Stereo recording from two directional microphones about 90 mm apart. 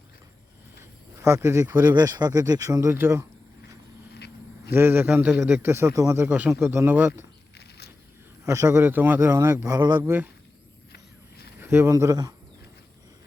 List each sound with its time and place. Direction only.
0.8 s a sound: 30° right (ahead or behind)
2.0 s speech: 45° right (ahead or behind); by 3.2 s 30° right (ahead or behind)
4.7 s a man's voice: 25° right (ahead or behind)
6.1 s a man's voice: 20° right (ahead or behind)
8.4 s a man's voice: 35° right (ahead or behind)
11.6 s speech: 25° right (ahead or behind); by 12.3 s 40° right (ahead or behind)